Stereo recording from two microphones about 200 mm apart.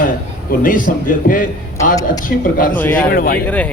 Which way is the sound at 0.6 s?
45° left (ahead or behind).